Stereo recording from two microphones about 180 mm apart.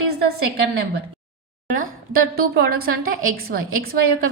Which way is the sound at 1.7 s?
50° right (ahead or behind).